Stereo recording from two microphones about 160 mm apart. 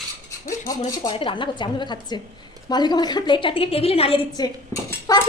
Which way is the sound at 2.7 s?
25° left (ahead or behind).